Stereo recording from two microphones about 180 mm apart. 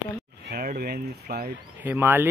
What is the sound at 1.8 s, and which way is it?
Speech, 10° right (ahead or behind).